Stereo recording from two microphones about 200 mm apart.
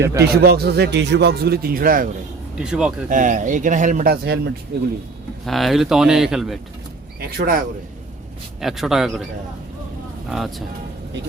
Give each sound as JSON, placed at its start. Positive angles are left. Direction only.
{"t": 0.0, "sound": "speech", "side_deg": -15}
{"t": 0.4, "sound": "speech", "side_deg": -50}
{"t": 2.6, "sound": "a man's voice", "side_deg": -5}
{"t": 3.1, "sound": "speech", "side_deg": -40}
{"t": 5.5, "sound": "a man's voice", "side_deg": 0}
{"t": 7.2, "sound": "speech", "side_deg": -50}
{"t": 8.6, "sound": "a man's voice", "side_deg": 0}